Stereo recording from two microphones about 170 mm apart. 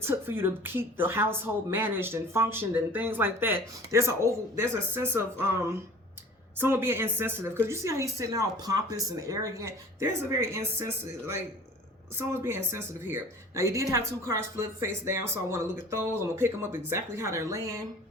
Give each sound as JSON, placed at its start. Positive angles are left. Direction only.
{"t": 0.0, "sound": "speech", "side_deg": -15}